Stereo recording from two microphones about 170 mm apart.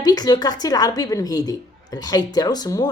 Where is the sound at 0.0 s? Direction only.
20° left (ahead or behind).